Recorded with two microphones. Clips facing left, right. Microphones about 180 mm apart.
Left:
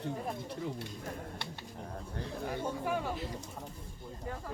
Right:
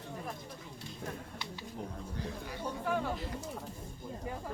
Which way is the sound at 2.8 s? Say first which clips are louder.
Even; 10° left (ahead or behind).